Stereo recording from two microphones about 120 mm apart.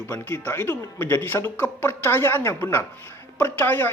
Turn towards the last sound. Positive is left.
turn(degrees=15)  # may be behind; listen again after turning